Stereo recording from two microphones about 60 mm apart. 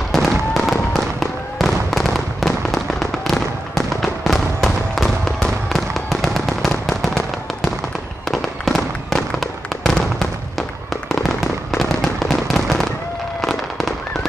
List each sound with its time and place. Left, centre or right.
0.1 s fireworks: centre